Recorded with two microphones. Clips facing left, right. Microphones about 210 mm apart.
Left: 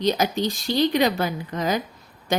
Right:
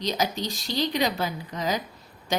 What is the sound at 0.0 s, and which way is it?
A woman's voice, 55° left (ahead or behind).